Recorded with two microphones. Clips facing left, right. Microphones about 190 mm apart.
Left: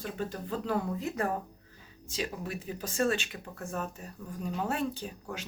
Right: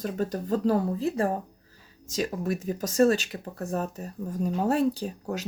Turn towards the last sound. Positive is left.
turn(degrees=-40)  # may be behind; listen again after turning